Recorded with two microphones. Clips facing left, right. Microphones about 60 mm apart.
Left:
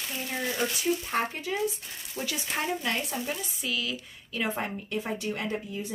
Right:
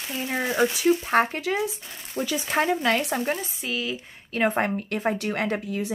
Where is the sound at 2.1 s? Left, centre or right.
Right.